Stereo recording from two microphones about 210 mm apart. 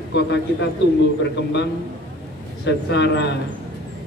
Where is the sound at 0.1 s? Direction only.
55° left (ahead or behind).